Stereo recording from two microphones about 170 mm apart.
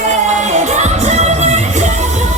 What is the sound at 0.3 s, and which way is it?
Music, 45° right (ahead or behind).